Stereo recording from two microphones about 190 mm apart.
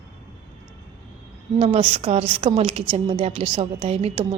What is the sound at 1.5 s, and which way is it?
A woman's voice, 30° right (ahead or behind).